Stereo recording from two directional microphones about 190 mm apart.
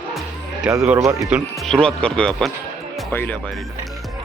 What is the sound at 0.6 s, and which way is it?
Speech, 5° right (ahead or behind).